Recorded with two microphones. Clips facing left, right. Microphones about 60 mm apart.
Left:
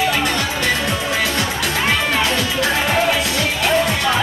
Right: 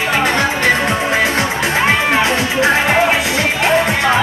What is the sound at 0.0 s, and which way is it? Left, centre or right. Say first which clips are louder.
Music: right 4 dB; right.